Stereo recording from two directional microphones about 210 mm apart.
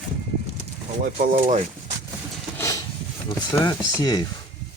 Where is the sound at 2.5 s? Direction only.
15° left (ahead or behind).